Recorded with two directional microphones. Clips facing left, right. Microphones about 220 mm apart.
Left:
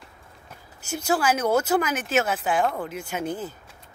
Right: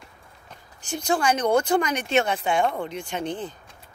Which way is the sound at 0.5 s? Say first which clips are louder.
Even; 5° left (ahead or behind).